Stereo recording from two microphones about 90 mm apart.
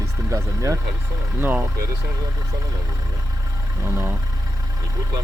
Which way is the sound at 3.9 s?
30° right (ahead or behind).